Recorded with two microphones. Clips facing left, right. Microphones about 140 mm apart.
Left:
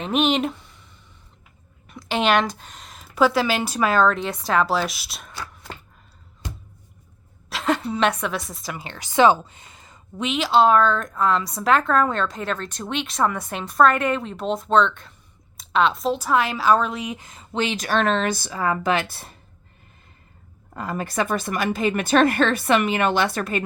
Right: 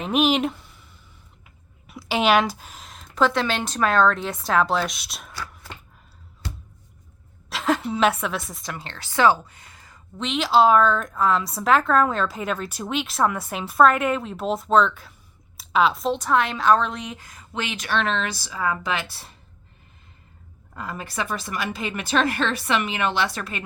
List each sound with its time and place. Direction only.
0.0 s speech: 5° right (ahead or behind)
1.9 s a woman's voice: 5° right (ahead or behind)
7.5 s a woman's voice: centre (ahead or behind); by 10.0 s 20° left (ahead or behind)
10.2 s a woman's voice: 5° left (ahead or behind)
17.2 s a woman's voice: 25° left (ahead or behind); by 19.3 s 50° left (ahead or behind)
20.7 s a woman's voice: 45° left (ahead or behind)